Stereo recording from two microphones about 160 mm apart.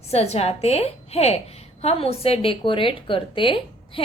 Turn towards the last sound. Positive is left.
turn(degrees=35)  # may be behind; listen again after turning